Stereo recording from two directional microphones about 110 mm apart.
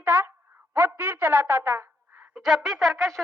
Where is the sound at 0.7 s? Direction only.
15° right (ahead or behind).